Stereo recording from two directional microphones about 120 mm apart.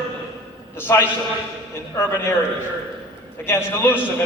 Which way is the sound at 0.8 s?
15° left (ahead or behind).